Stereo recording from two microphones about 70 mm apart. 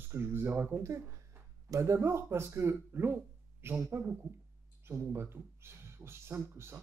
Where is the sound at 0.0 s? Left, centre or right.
Right.